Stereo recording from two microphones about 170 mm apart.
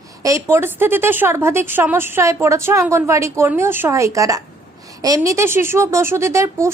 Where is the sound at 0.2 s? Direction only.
20° right (ahead or behind).